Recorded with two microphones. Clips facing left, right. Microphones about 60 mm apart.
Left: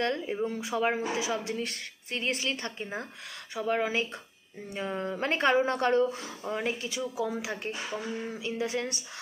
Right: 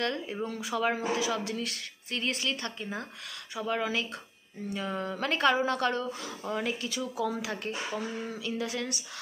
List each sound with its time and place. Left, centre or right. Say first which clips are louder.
0.0 s speech: left 3 dB; left